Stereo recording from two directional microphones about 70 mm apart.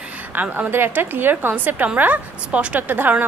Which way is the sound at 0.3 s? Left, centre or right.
Right.